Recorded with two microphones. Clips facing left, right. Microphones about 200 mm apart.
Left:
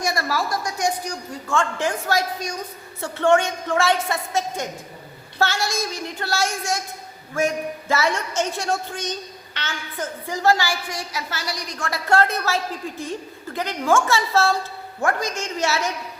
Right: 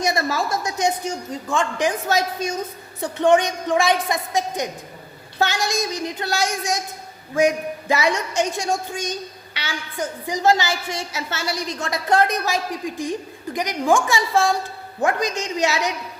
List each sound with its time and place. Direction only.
0.0 s a man's voice: 20° right (ahead or behind)